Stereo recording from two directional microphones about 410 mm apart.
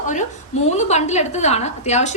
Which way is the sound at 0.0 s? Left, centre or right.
Centre.